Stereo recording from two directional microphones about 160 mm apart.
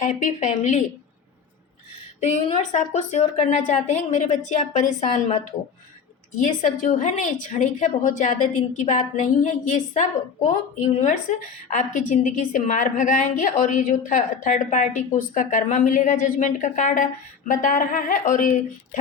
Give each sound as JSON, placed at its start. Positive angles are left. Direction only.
{"t": 0.0, "sound": "a woman's voice", "side_deg": 50}
{"t": 2.2, "sound": "a woman's voice", "side_deg": 45}
{"t": 6.3, "sound": "a woman's voice", "side_deg": 50}